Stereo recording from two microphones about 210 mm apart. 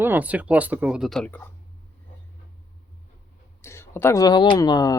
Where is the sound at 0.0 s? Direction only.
10° right (ahead or behind); by 1.5 s 5° left (ahead or behind).